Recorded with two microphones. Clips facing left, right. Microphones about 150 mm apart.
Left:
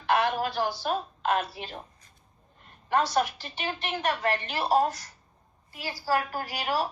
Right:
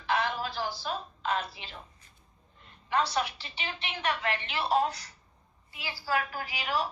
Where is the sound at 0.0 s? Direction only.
55° left (ahead or behind).